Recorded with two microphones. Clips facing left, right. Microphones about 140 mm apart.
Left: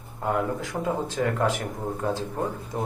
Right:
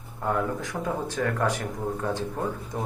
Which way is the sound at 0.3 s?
15° left (ahead or behind).